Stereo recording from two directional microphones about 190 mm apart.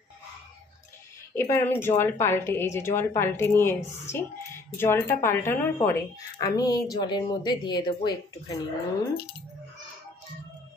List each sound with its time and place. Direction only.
1.3 s a woman's voice: 10° left (ahead or behind)